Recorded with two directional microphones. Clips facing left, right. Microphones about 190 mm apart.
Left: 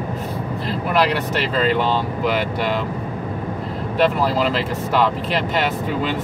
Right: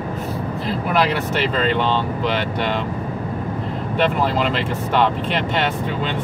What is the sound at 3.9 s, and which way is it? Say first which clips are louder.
Speech: left 1 dB; 5° left (ahead or behind).